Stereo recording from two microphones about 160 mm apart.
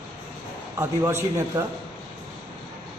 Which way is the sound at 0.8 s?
15° right (ahead or behind).